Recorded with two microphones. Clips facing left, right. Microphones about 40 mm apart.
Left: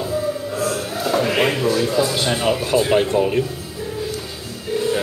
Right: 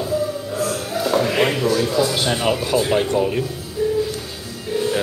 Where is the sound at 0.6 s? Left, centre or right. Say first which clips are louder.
Right 2 dB; centre.